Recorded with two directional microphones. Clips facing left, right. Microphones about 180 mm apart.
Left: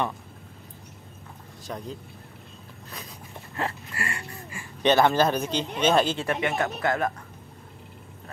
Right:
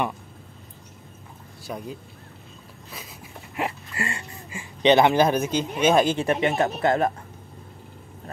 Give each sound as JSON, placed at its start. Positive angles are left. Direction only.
{"t": 1.7, "sound": "speech", "side_deg": -10}
{"t": 3.5, "sound": "speech", "side_deg": -20}